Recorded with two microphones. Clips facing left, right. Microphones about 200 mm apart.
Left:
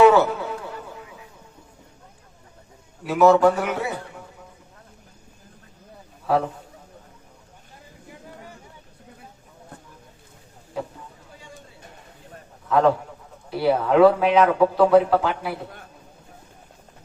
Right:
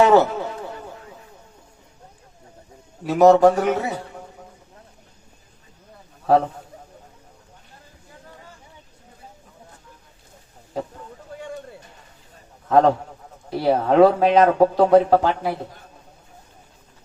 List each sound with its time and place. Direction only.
0.0 s speech: 40° right (ahead or behind)
3.0 s speech: 40° right (ahead or behind)
11.3 s a sound: 55° right (ahead or behind)
12.6 s a man's voice: 40° right (ahead or behind)